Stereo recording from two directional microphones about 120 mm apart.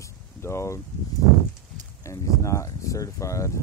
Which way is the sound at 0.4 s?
25° left (ahead or behind).